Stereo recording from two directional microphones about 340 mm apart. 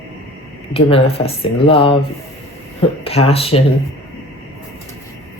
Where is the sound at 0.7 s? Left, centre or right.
Centre.